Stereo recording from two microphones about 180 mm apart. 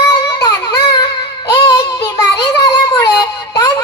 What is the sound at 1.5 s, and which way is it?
Child singing, 25° left (ahead or behind).